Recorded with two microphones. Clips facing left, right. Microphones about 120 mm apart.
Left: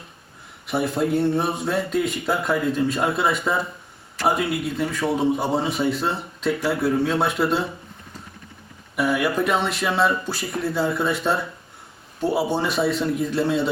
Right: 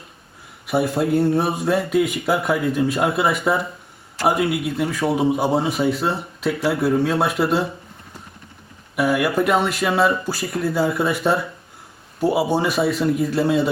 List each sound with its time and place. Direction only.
0.7 s a man's voice: centre (ahead or behind)
9.0 s a man's voice: centre (ahead or behind)